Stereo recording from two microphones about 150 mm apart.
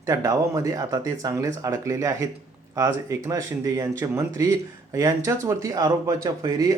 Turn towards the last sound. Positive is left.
turn(degrees=-25)  # may be behind; listen again after turning